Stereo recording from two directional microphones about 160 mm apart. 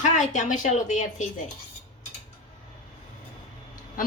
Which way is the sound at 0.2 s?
50° left (ahead or behind).